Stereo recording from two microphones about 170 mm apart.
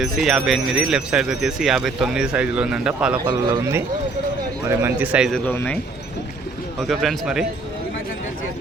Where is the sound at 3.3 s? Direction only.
20° right (ahead or behind); by 5.4 s 5° right (ahead or behind).